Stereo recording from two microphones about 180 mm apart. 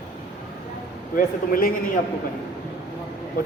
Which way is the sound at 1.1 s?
50° left (ahead or behind).